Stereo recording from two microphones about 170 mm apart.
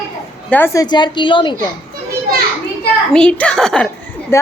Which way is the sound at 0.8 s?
25° left (ahead or behind).